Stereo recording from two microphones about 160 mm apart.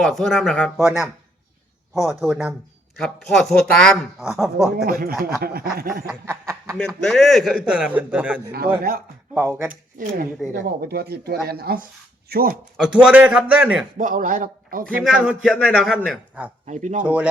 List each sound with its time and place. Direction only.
0.0 s speech: centre (ahead or behind)
4.9 s speech: 65° right (ahead or behind)
6.1 s snicker: 20° right (ahead or behind)
6.7 s speech: 5° left (ahead or behind)
8.5 s speech: 65° right (ahead or behind)
9.3 s a man's voice: 15° right (ahead or behind)
10.0 s a man's voice: 55° right (ahead or behind)
10.5 s speech: 75° right (ahead or behind)
12.7 s a man's voice: 5° right (ahead or behind)
14.0 s a man's voice: 55° right (ahead or behind)
15.1 s a man's voice: 5° right (ahead or behind)
15.7 s speech: 5° left (ahead or behind)
16.6 s speech: 50° right (ahead or behind)
17.0 s a man's voice: 10° right (ahead or behind)